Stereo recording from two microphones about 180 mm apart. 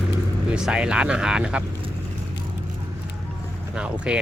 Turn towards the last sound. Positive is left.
turn(degrees=-5)  # may be behind; listen again after turning